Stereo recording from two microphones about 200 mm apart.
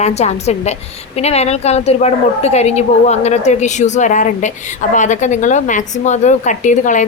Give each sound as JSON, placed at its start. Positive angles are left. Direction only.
{"t": 0.0, "sound": "a woman's voice", "side_deg": 35}